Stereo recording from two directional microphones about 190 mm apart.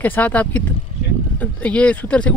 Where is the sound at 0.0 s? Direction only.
10° left (ahead or behind).